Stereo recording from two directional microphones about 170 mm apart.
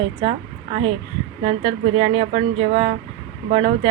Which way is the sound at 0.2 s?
30° right (ahead or behind).